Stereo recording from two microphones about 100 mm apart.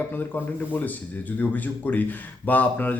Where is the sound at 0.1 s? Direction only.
20° left (ahead or behind).